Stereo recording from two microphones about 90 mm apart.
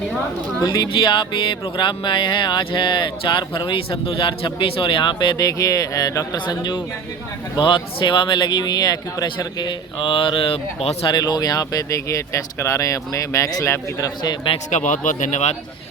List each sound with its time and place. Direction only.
0.6 s speech: 50° left (ahead or behind)
5.5 s speech: 40° left (ahead or behind)
6.4 s speech: 60° left (ahead or behind)
9.6 s speech: 65° left (ahead or behind); by 10.8 s 90° left
11.1 s speech: 50° left (ahead or behind)